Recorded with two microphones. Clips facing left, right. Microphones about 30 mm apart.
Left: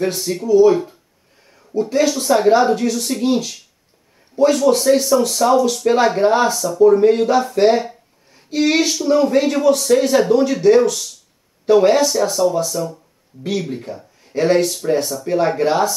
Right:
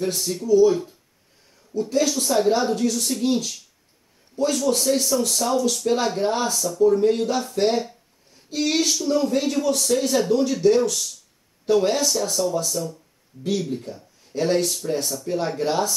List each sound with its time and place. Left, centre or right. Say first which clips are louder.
0.0 s speech: left 5 dB; centre